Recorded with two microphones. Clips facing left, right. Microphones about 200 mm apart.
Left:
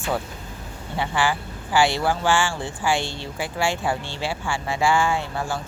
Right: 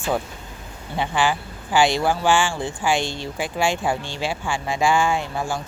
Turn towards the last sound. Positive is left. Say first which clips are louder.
# right 1 dB
turn(degrees=-15)  # may be behind; listen again after turning